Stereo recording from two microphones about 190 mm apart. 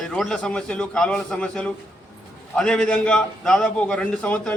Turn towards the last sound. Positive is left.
turn(degrees=10)  # may be behind; listen again after turning